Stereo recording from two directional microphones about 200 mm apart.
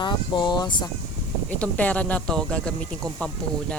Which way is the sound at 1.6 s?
5° left (ahead or behind).